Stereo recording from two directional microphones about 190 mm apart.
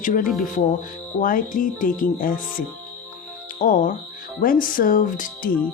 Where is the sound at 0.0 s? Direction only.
45° left (ahead or behind).